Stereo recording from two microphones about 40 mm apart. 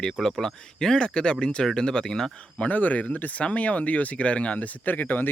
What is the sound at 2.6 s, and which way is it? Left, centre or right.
Speech, left.